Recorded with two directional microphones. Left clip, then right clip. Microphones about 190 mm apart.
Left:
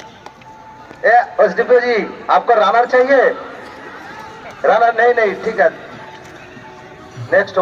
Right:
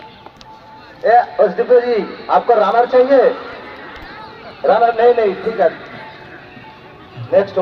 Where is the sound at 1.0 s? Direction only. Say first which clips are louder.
Even; 50° left (ahead or behind).